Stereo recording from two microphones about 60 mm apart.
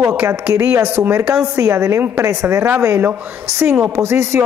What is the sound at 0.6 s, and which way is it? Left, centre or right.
Speech, right.